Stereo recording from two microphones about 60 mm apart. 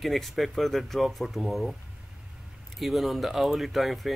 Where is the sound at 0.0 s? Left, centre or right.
Centre.